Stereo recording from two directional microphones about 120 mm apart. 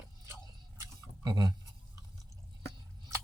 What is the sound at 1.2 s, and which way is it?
Speech, 35° right (ahead or behind).